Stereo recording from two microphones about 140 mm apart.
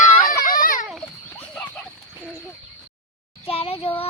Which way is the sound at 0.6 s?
75° left (ahead or behind).